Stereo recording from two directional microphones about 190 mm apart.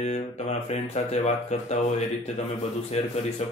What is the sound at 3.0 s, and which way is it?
Mantra, 35° left (ahead or behind).